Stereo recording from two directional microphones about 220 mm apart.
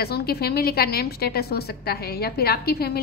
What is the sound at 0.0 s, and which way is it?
A woman's voice, 45° left (ahead or behind).